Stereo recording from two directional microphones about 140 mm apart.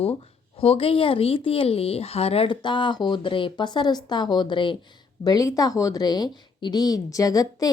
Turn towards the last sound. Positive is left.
turn(degrees=25)  # may be behind; listen again after turning